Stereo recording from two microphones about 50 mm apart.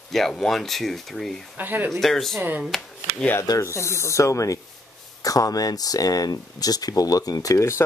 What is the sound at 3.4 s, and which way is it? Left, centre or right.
Speech, left.